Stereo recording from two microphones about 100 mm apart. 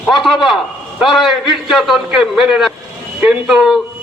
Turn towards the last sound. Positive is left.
turn(degrees=-5)  # may be behind; listen again after turning